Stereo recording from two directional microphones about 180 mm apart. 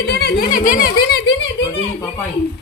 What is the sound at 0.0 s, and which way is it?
Speech, 65° left (ahead or behind).